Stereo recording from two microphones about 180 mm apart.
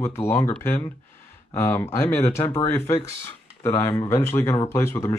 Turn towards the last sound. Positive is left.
turn(degrees=15)  # may be behind; listen again after turning